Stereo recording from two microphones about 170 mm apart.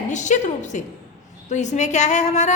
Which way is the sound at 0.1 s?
45° left (ahead or behind).